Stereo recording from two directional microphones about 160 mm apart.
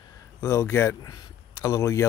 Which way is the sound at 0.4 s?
15° left (ahead or behind).